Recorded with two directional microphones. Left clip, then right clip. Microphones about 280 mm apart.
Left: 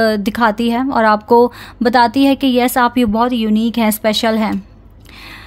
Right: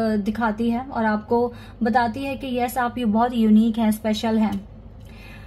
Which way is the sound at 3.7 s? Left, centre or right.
Left.